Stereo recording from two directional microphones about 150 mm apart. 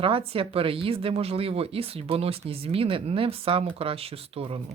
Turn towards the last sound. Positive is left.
turn(degrees=-35)  # may be behind; listen again after turning